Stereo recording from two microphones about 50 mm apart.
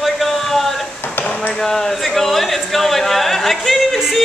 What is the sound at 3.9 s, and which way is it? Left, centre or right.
Yodeling, centre.